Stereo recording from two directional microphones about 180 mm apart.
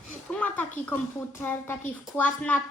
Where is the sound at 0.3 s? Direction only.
10° left (ahead or behind).